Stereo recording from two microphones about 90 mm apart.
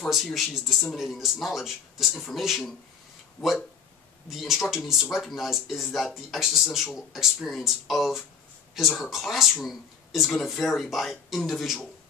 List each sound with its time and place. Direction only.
0.0 s speech: centre (ahead or behind)
3.4 s speech: 20° left (ahead or behind)
4.3 s speech: 5° right (ahead or behind)